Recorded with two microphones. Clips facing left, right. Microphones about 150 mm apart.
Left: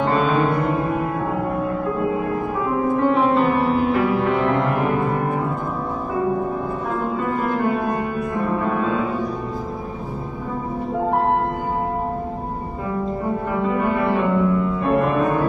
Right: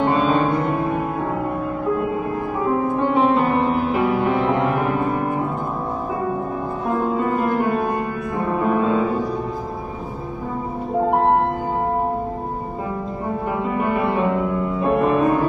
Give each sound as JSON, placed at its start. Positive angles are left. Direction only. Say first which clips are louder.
{"t": 0.0, "sound": "music", "louder": "right 1 dB", "side_deg": -15}
{"t": 3.0, "sound": "music", "louder": "left 1 dB", "side_deg": -20}
{"t": 8.5, "sound": "music", "louder": "right 6 dB", "side_deg": -20}
{"t": 13.7, "sound": "music", "louder": "right 1 dB", "side_deg": -20}